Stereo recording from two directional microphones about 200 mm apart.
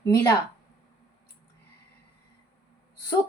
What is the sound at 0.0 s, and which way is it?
Female singing, 15° left (ahead or behind).